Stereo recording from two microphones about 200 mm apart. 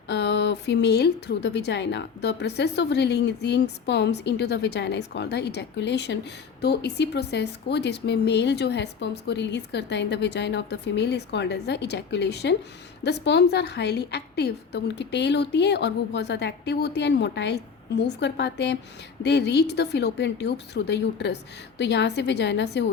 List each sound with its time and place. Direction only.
0.1 s a woman's voice: 60° left (ahead or behind)